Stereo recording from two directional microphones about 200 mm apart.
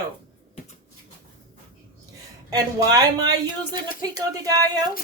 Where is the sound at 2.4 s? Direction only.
20° right (ahead or behind).